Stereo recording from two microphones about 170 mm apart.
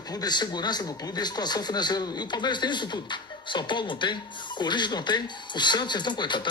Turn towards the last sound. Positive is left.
turn(degrees=25)  # may be behind; listen again after turning